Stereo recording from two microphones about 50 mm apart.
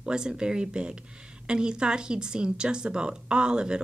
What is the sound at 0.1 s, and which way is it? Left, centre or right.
Speech, centre.